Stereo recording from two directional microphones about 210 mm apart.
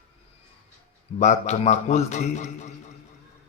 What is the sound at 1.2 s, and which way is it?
A man's voice, 35° left (ahead or behind).